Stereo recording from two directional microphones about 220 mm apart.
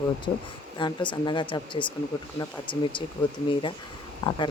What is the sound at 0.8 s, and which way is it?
A man's voice, 20° left (ahead or behind).